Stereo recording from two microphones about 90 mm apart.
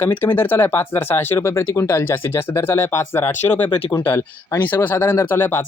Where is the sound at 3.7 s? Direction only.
75° left (ahead or behind).